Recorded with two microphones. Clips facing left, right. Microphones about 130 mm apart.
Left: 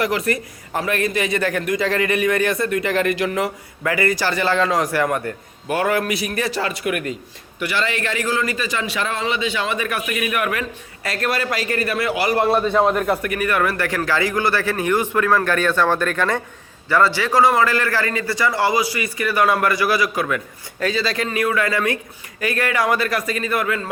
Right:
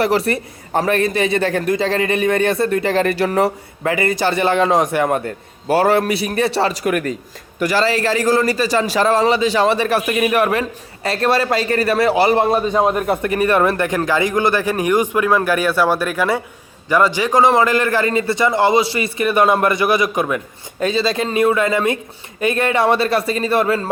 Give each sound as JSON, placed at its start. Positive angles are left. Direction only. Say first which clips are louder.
{"t": 0.0, "sound": "a man's voice", "louder": "right 4 dB", "side_deg": -30}
{"t": 12.5, "sound": "a man's voice", "louder": "right 1 dB", "side_deg": -15}